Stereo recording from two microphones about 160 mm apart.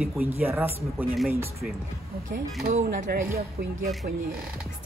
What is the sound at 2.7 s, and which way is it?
Speech, 55° right (ahead or behind).